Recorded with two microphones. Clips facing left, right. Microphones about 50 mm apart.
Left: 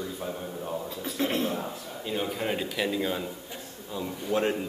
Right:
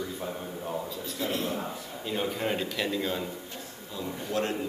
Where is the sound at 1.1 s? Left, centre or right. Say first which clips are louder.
Left 3 dB; left.